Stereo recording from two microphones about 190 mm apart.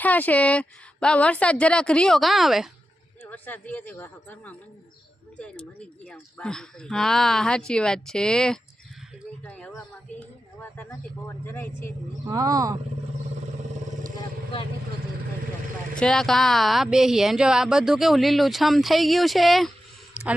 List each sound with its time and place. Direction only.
0.0 s speech: 10° left (ahead or behind)
3.2 s speech: 10° left (ahead or behind)
6.1 s speech: 5° left (ahead or behind)
12.2 s speech: 20° right (ahead or behind)
14.2 s vehicle: 25° left (ahead or behind)
16.0 s speech: 5° left (ahead or behind)
20.1 s a sound: 5° right (ahead or behind)